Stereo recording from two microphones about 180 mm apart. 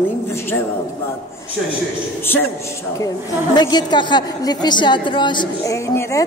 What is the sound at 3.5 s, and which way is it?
A woman's voice, 25° left (ahead or behind).